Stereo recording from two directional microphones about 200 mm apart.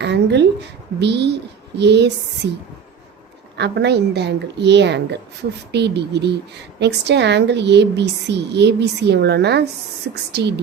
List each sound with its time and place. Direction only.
0.0 s a woman's voice: 60° right (ahead or behind)
3.6 s a woman's voice: 55° right (ahead or behind)